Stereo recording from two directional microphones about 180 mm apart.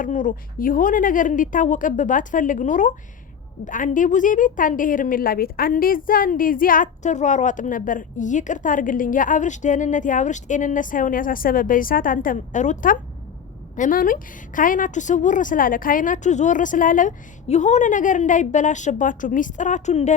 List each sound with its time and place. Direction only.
0.0 s a woman's voice: 45° left (ahead or behind)